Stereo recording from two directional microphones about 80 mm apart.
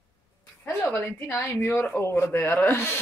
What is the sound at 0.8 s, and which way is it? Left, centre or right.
Speech, left.